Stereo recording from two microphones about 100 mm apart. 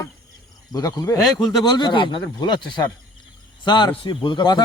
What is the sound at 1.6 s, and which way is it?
A man's voice, 45° left (ahead or behind).